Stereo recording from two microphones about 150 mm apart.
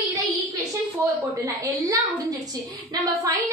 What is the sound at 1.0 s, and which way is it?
A woman's voice, 25° right (ahead or behind).